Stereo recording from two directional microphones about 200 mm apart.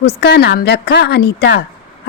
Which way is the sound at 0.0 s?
55° left (ahead or behind).